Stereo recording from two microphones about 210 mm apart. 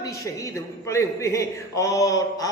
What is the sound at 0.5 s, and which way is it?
A man's voice, 15° left (ahead or behind).